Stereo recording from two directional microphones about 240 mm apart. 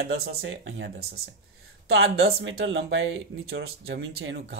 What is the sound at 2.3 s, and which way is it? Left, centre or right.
Speech, right.